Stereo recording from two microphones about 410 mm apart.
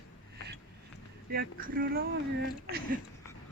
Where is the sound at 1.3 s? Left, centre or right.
Right.